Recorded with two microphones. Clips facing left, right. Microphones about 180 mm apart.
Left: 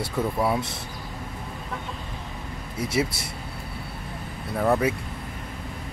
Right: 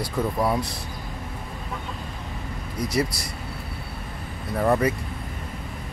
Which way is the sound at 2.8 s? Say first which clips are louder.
Right 1 dB; 5° left (ahead or behind).